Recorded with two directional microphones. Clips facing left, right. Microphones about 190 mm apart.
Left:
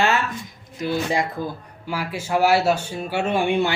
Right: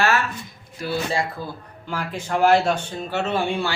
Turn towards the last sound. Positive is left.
turn(degrees=20)  # may be behind; listen again after turning